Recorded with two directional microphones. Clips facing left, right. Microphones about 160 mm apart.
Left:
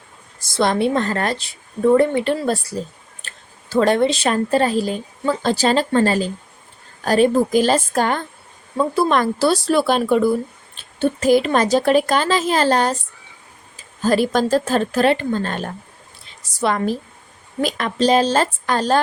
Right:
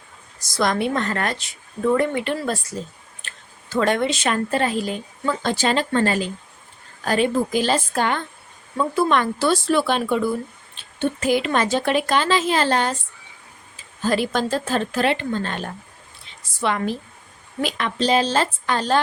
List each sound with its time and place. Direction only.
0.3 s speech: 30° left (ahead or behind)
14.0 s speech: 40° left (ahead or behind)